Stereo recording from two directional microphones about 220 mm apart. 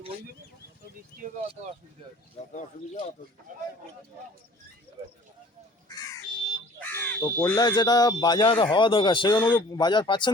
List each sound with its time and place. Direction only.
1.2 s speech: 35° right (ahead or behind)
2.5 s speech: 35° left (ahead or behind)
6.7 s speech: 10° left (ahead or behind)